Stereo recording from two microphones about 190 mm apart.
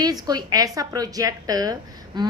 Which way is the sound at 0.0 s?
20° right (ahead or behind).